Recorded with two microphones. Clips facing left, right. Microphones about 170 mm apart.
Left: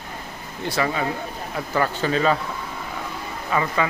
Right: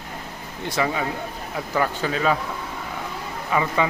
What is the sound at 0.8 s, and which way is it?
Speech, 15° right (ahead or behind).